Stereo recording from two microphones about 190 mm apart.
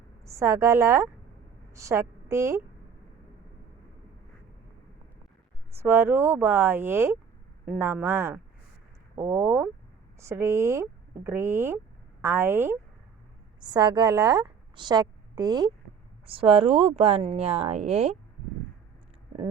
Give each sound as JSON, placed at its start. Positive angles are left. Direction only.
{"t": 0.3, "sound": "a woman's voice", "side_deg": -15}
{"t": 5.7, "sound": "speech", "side_deg": -10}
{"t": 13.6, "sound": "a woman's voice", "side_deg": -25}